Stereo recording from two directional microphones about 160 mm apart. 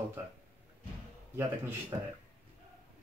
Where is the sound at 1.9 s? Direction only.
25° right (ahead or behind).